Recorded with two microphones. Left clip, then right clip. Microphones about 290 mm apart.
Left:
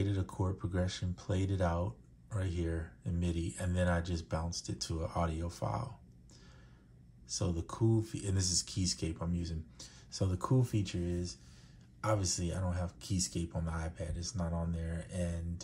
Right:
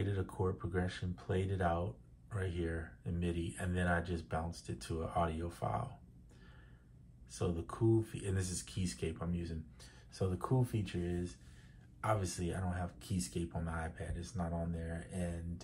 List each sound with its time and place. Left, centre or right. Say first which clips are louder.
0.0 s a sound: even; left
2.3 s speech: left 1 dB; left
7.2 s speech: left 1 dB; left